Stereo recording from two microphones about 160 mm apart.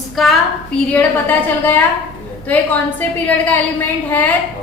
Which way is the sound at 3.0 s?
10° left (ahead or behind).